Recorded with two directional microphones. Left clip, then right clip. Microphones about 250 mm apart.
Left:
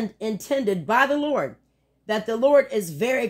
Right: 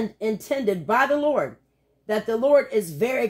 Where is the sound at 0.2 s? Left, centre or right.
Left.